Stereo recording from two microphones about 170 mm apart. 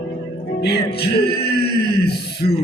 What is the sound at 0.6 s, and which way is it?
Music, 75° left (ahead or behind).